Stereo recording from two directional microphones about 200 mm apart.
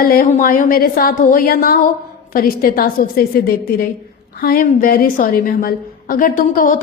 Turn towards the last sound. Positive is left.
turn(degrees=40)  # may be behind; listen again after turning